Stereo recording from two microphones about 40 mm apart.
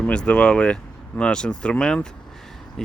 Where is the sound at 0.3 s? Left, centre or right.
Left.